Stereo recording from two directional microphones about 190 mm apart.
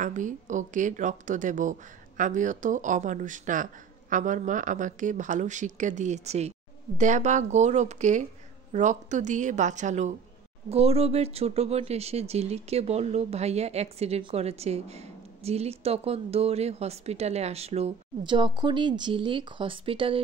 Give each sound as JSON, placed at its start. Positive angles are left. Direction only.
{"t": 0.0, "sound": "speech", "side_deg": -40}